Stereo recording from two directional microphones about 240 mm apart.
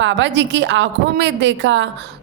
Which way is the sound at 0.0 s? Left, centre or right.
Right.